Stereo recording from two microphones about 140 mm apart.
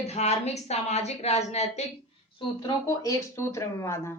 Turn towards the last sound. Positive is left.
turn(degrees=20)  # may be behind; listen again after turning